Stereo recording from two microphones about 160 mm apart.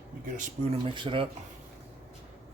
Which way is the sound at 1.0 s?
30° right (ahead or behind).